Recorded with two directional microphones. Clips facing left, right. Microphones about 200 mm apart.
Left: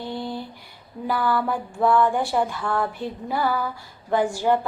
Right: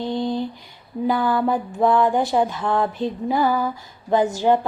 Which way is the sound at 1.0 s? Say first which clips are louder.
Right 4 dB; 20° right (ahead or behind).